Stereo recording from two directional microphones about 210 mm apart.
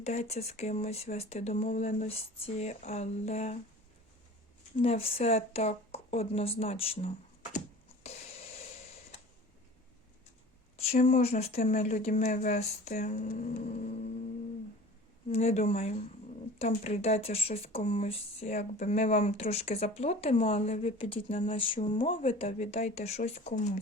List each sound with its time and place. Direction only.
0.0 s speech: 30° left (ahead or behind)
4.8 s speech: 25° left (ahead or behind)
10.9 s speech: 35° left (ahead or behind)
15.3 s speech: 30° left (ahead or behind)